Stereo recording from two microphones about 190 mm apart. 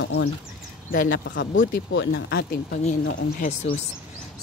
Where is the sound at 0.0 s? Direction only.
75° left (ahead or behind).